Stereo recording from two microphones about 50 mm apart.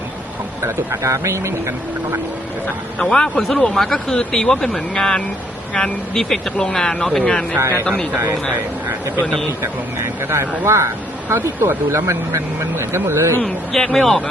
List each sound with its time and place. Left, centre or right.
0.6 s speech: right
3.0 s speech: centre
7.6 s speech: right
10.2 s speech: right
13.4 s speech: centre